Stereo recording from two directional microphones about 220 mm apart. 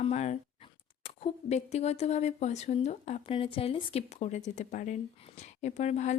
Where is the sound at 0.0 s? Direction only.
30° left (ahead or behind).